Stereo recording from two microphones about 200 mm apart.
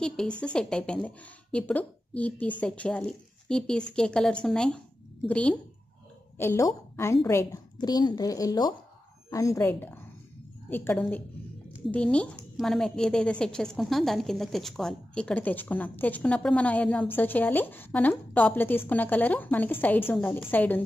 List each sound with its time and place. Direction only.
0.0 s a woman's voice: 5° left (ahead or behind)